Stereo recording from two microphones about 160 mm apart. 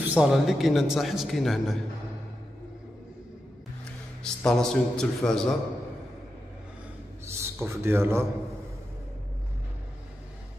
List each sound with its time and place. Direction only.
0.1 s a man's voice: 5° right (ahead or behind)
4.4 s a man's voice: 5° left (ahead or behind)
7.2 s a man's voice: 15° right (ahead or behind)